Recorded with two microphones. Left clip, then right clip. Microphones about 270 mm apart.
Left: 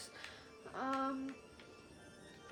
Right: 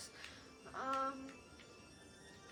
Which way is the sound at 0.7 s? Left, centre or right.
Left.